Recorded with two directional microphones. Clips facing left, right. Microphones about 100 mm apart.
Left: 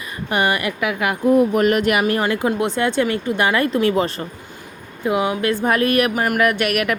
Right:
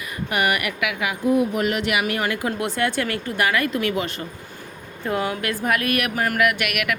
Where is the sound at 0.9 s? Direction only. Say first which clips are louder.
Left 5 dB; 50° left (ahead or behind); by 4.3 s 35° left (ahead or behind).